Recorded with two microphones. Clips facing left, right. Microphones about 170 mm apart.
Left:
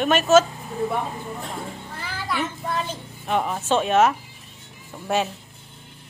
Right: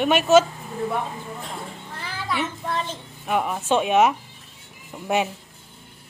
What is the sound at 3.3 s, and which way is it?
Speech, 5° right (ahead or behind).